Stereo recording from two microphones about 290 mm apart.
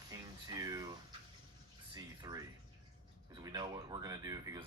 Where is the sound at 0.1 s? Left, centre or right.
Centre.